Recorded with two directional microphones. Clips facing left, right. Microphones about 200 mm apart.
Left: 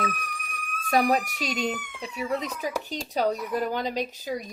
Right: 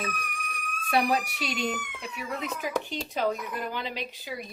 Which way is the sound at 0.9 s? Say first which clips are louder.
Left 3 dB; 40° left (ahead or behind).